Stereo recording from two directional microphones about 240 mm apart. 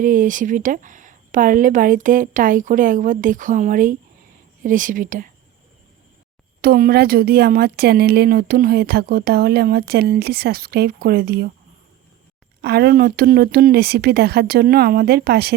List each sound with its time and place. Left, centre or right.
0.0 s a woman's voice: right
6.6 s a woman's voice: right
12.6 s a woman's voice: right